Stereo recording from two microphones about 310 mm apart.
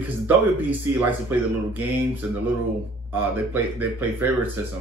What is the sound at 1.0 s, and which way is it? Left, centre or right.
Speech, centre.